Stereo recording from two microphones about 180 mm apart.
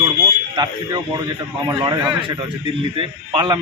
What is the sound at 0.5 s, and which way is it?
A man's voice, 25° right (ahead or behind).